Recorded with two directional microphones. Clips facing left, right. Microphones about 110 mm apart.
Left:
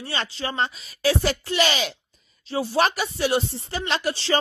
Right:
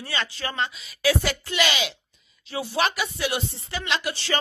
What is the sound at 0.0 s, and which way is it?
Speech, 35° left (ahead or behind).